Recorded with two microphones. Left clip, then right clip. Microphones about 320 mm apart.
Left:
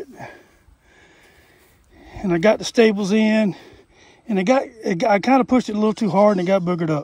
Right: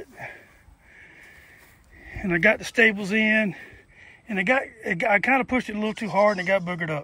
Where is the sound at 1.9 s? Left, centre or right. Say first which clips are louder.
Left 3 dB; left.